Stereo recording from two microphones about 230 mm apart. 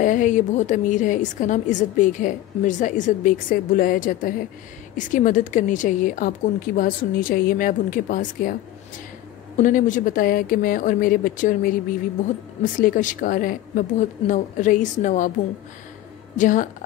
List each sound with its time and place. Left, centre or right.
0.0 s a woman's voice: left
9.6 s a woman's voice: left
12.7 s a woman's voice: left
16.3 s a woman's voice: left